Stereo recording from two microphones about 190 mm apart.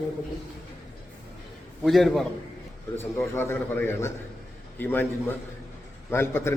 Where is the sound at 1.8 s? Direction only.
Centre (ahead or behind).